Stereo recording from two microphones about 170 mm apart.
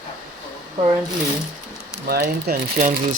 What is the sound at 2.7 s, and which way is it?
Speech, 50° right (ahead or behind).